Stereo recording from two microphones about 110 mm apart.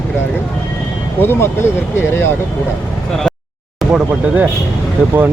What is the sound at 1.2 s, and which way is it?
Speech, 20° left (ahead or behind).